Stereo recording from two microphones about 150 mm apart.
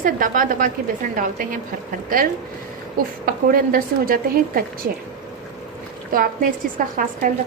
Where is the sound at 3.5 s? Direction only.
75° right (ahead or behind).